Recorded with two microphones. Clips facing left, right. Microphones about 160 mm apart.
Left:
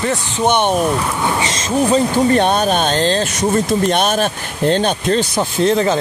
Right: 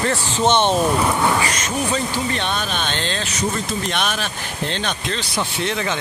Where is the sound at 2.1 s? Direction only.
45° left (ahead or behind).